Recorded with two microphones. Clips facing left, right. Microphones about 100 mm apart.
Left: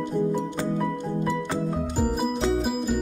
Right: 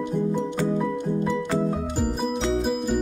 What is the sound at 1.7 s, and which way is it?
Music, centre (ahead or behind).